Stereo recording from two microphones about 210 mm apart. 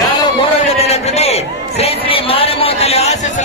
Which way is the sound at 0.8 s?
30° left (ahead or behind).